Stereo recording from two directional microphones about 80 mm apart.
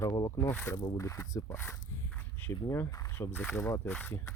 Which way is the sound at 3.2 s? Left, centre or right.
Left.